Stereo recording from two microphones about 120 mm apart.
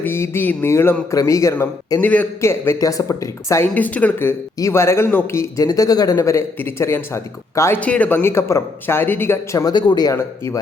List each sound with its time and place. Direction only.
0.0 s speech: 20° left (ahead or behind)
3.8 s speech: 15° left (ahead or behind)
7.8 s speech: 10° left (ahead or behind)
9.7 s speech: 35° left (ahead or behind)
10.1 s speech: 25° left (ahead or behind)